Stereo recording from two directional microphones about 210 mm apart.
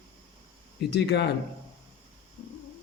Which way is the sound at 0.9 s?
50° left (ahead or behind).